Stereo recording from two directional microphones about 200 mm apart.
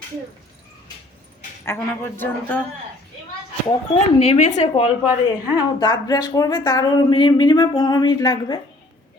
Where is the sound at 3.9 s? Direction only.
35° left (ahead or behind).